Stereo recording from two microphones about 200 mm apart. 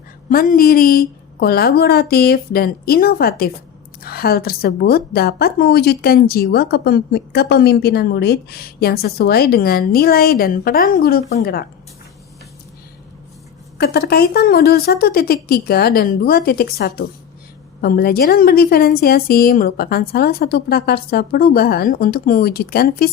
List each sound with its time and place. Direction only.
0.3 s a woman's voice: 45° left (ahead or behind)
13.7 s a woman's voice: 50° left (ahead or behind)